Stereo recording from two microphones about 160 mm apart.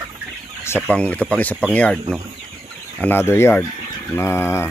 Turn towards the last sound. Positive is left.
turn(degrees=15)  # may be behind; listen again after turning